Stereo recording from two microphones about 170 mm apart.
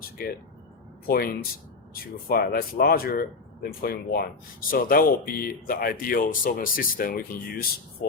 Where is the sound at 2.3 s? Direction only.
60° left (ahead or behind).